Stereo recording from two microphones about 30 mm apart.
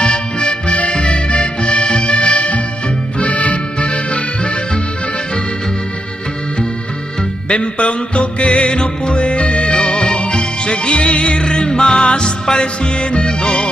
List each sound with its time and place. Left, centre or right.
0.0 s accordion: left
7.4 s music: left
11.4 s music: left